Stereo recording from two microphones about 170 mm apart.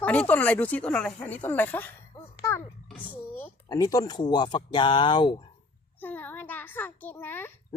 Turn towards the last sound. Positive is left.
turn(degrees=10)  # may be behind; listen again after turning